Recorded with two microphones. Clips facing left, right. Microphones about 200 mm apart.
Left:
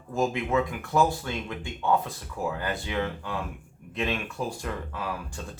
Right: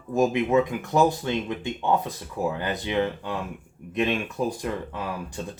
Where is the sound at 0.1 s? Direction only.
20° right (ahead or behind).